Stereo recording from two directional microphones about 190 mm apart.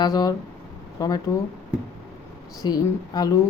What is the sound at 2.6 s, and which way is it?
Speech, 20° left (ahead or behind).